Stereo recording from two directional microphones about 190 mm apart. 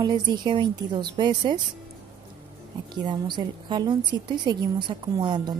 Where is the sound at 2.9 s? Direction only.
25° right (ahead or behind).